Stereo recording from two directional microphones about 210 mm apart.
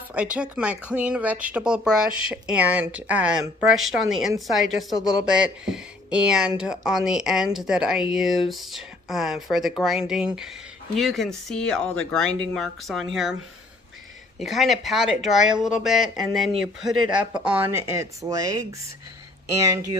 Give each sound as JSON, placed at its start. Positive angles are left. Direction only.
{"t": 0.1, "sound": "speech", "side_deg": -5}
{"t": 14.3, "sound": "speech", "side_deg": 0}